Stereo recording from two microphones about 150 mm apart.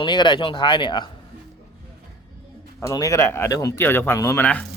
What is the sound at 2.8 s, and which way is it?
Speech, 20° left (ahead or behind).